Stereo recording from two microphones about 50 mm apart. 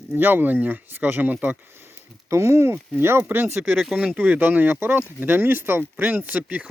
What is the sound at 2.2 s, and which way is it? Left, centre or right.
Speech, right.